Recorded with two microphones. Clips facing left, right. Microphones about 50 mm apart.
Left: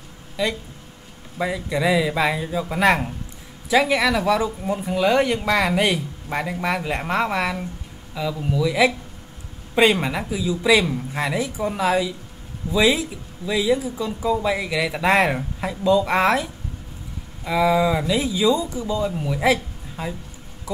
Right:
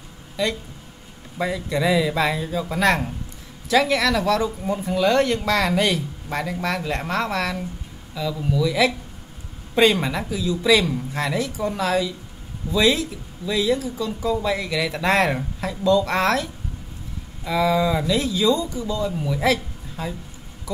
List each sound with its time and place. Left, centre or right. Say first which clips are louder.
0.4 s speech: even; centre
17.5 s a woman's voice: left 1 dB; centre